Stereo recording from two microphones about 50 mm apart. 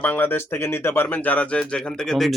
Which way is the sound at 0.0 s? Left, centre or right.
Left.